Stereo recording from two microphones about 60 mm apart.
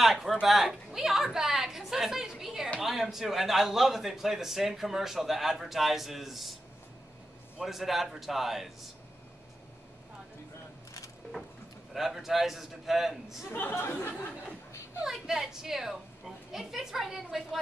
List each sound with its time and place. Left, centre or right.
0.0 s a sound: centre
2.8 s a man's voice: centre
7.6 s a man's voice: centre
11.9 s a man's voice: centre
13.5 s speech: left
14.2 s speech: left
15.0 s a man's voice: centre